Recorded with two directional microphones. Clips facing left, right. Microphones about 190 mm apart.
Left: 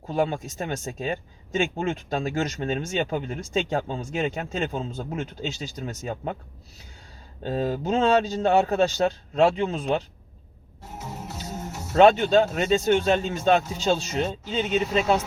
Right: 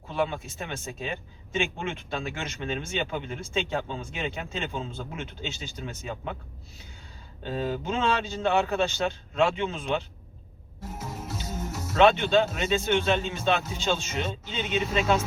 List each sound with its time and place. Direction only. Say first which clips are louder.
0.1 s speech: left 4 dB; 40° left (ahead or behind)
7.4 s speech: left 4 dB; 40° left (ahead or behind)
11.9 s speech: left 4 dB; 40° left (ahead or behind)